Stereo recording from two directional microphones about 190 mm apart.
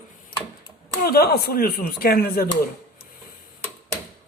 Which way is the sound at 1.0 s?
55° left (ahead or behind).